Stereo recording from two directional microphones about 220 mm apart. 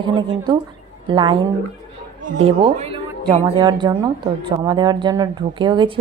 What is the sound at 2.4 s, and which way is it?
Speech, 25° right (ahead or behind).